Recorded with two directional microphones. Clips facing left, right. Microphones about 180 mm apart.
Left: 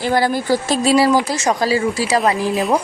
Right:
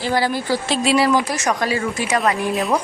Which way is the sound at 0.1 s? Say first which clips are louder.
Left 3 dB; 45° left (ahead or behind).